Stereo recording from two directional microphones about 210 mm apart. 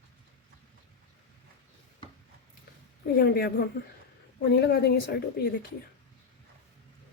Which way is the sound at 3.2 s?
45° left (ahead or behind).